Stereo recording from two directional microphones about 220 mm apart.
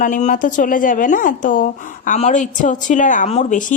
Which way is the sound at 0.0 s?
35° left (ahead or behind).